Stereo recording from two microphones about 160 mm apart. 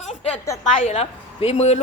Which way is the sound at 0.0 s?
45° left (ahead or behind).